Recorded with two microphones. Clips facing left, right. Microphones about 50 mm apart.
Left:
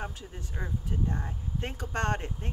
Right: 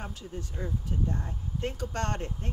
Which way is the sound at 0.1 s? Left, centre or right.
Left.